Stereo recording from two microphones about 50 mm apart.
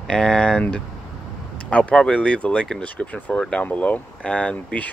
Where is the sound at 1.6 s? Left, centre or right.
Left.